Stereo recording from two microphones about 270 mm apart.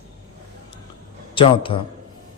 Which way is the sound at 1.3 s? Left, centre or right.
Centre.